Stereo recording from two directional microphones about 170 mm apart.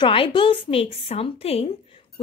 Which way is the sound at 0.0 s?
30° left (ahead or behind).